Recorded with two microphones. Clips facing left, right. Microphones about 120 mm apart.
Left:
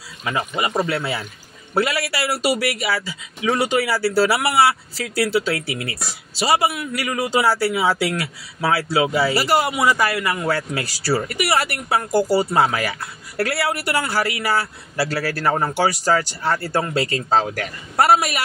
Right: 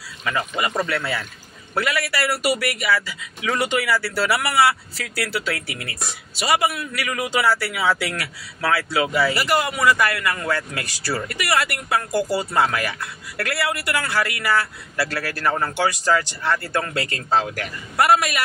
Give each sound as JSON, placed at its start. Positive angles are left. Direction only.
{"t": 0.2, "sound": "a man's voice", "side_deg": 25}
{"t": 7.0, "sound": "a man's voice", "side_deg": 30}
{"t": 12.3, "sound": "speech", "side_deg": 10}
{"t": 13.4, "sound": "a man's voice", "side_deg": 30}